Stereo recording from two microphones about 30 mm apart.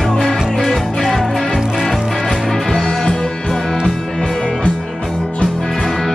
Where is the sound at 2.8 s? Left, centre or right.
Centre.